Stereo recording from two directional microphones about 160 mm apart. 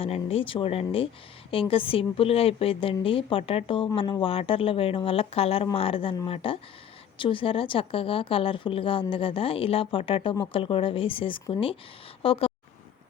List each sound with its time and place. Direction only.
0.0 s a woman's voice: 35° left (ahead or behind)